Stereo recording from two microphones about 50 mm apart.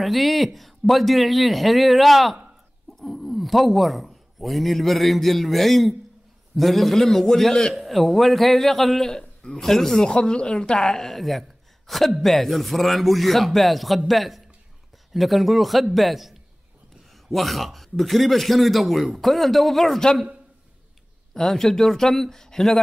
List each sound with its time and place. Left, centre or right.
0.0 s speech: centre
9.2 s a sound: centre
9.6 s speech: centre
10.0 s speech: centre
21.3 s speech: centre